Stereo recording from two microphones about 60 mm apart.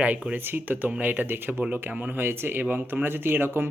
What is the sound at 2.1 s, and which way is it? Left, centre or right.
Speech, right.